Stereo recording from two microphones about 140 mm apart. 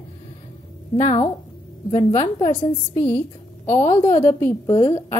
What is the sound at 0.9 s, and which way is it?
Speech, 50° left (ahead or behind).